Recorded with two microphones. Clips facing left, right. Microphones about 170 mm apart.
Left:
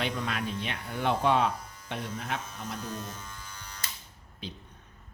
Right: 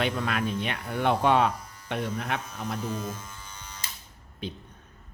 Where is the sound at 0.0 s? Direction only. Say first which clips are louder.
Right 4 dB; 60° right (ahead or behind).